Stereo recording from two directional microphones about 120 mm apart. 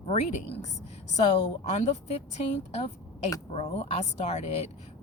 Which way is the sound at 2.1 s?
60° left (ahead or behind).